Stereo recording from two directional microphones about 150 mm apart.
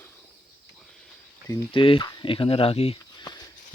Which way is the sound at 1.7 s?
35° left (ahead or behind).